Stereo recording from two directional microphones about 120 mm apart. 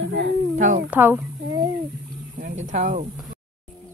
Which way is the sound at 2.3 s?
90° right.